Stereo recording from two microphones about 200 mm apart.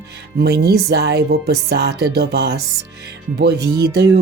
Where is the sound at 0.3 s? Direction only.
55° right (ahead or behind).